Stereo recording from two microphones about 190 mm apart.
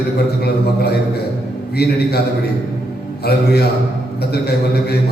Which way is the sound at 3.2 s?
55° left (ahead or behind).